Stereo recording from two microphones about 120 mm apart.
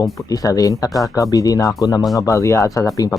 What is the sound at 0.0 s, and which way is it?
Speech, 30° left (ahead or behind).